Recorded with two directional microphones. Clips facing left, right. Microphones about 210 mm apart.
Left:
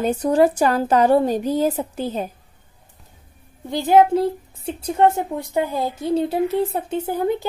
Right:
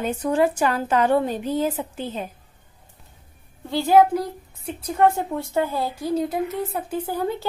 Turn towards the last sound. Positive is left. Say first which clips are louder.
# left 4 dB
turn(degrees=20)  # may be behind; listen again after turning